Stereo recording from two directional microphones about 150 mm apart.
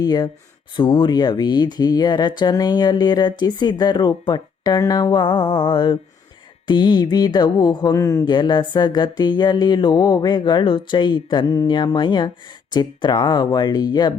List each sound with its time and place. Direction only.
0.0 s speech: 25° left (ahead or behind)